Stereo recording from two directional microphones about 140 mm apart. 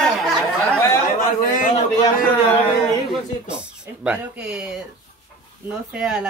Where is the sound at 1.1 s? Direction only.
70° left (ahead or behind).